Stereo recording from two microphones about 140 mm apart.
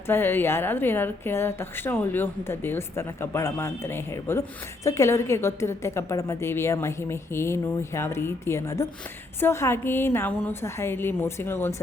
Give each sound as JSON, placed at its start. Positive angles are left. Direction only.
{"t": 0.1, "sound": "a woman's voice", "side_deg": 15}